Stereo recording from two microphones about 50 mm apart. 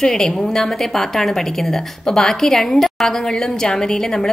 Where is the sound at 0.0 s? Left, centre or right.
Centre.